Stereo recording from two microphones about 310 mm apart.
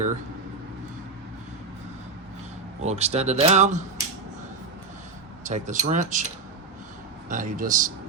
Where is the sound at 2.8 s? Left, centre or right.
Right.